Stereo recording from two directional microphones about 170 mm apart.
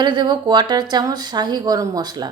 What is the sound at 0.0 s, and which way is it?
A woman's voice, 25° right (ahead or behind).